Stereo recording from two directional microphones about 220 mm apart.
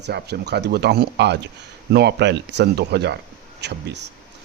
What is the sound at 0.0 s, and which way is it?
Speech, 50° right (ahead or behind).